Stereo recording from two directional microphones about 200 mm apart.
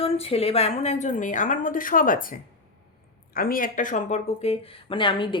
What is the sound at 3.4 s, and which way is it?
Speech, 45° left (ahead or behind).